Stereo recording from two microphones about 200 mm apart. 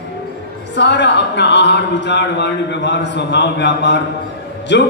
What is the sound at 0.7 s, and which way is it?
Speech, 60° left (ahead or behind).